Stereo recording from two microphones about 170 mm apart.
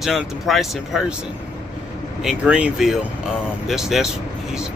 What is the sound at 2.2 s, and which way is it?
Speech, 10° right (ahead or behind).